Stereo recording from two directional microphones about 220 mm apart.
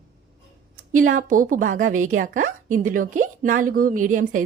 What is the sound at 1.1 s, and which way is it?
A woman's voice, 40° right (ahead or behind).